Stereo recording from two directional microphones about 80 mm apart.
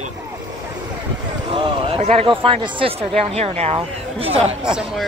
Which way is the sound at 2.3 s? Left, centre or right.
Right.